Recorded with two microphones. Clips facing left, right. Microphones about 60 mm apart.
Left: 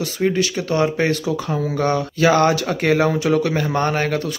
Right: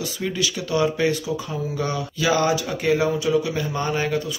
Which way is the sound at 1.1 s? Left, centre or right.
Left.